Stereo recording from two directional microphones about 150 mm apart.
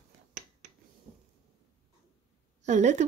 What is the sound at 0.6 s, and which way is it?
Finger snapping, 55° right (ahead or behind).